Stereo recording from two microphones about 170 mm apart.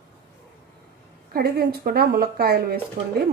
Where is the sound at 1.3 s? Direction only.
65° right (ahead or behind).